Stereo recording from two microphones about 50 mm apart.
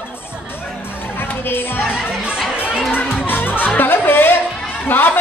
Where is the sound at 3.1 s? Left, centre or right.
Left.